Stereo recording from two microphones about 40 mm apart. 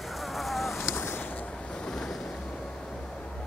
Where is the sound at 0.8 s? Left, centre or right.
Left.